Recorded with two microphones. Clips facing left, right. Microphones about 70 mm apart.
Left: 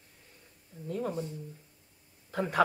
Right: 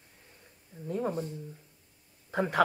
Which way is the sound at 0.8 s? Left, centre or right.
Centre.